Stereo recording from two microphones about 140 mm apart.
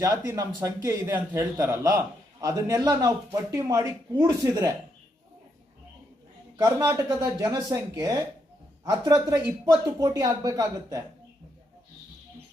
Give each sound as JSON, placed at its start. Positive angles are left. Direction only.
{"t": 0.0, "sound": "a man's voice", "side_deg": -25}
{"t": 6.6, "sound": "a man's voice", "side_deg": -20}